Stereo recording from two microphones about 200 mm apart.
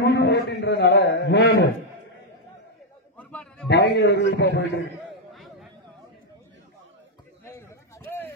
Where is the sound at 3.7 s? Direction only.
55° left (ahead or behind).